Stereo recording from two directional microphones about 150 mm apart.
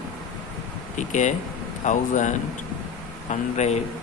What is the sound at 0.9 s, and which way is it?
Speech, 55° left (ahead or behind).